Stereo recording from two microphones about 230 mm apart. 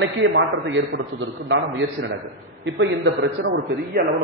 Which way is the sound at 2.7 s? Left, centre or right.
Right.